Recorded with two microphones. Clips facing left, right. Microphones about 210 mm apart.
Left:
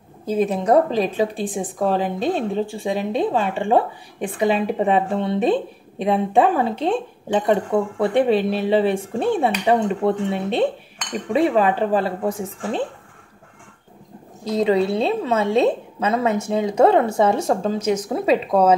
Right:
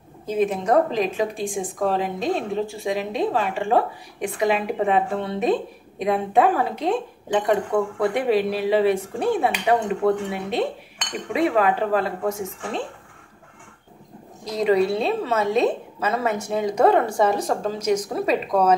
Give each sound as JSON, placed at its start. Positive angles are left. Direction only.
{"t": 0.3, "sound": "a woman's voice", "side_deg": 35}
{"t": 14.4, "sound": "a woman's voice", "side_deg": 25}